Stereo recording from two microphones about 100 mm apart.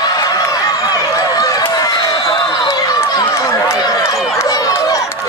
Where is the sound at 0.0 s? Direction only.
40° left (ahead or behind).